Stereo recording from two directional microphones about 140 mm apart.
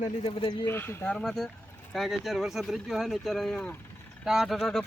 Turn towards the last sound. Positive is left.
turn(degrees=0)  # may be behind; listen again after turning